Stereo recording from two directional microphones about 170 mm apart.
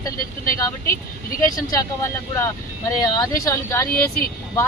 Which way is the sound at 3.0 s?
20° left (ahead or behind).